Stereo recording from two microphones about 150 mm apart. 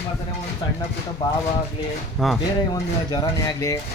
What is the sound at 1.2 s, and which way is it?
Speech, 25° left (ahead or behind).